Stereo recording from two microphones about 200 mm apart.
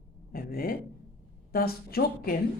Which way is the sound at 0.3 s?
45° left (ahead or behind).